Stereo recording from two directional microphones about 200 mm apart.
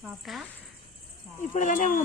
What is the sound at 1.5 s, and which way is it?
Speech, 40° left (ahead or behind).